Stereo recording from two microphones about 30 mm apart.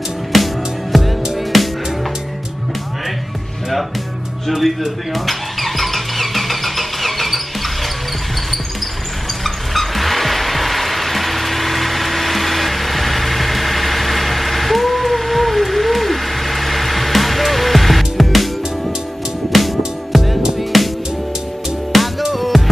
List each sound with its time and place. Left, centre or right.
0.3 s music: centre
4.5 s squeal: centre
9.4 s music: centre
19.5 s music: centre
21.9 s music: centre